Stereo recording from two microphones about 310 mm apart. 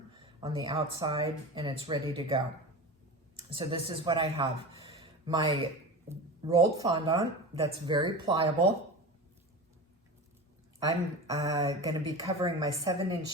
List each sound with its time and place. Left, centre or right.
0.2 s speech: centre
3.5 s speech: centre
10.8 s speech: centre